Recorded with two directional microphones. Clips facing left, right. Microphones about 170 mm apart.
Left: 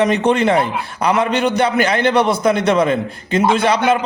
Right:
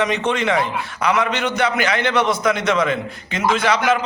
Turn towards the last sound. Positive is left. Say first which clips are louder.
# left 3 dB
turn(degrees=30)  # may be behind; listen again after turning